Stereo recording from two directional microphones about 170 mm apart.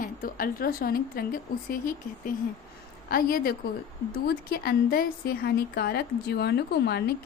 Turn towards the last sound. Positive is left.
turn(degrees=75)  # may be behind; listen again after turning